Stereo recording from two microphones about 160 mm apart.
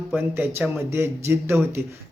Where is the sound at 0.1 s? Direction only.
10° right (ahead or behind).